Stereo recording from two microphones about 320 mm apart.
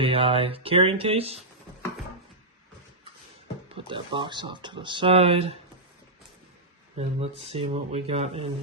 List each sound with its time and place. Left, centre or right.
0.0 s speech: centre
3.7 s speech: centre
6.9 s speech: centre